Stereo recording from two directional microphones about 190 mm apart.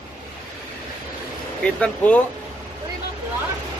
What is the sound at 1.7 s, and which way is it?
Speech, 5° left (ahead or behind).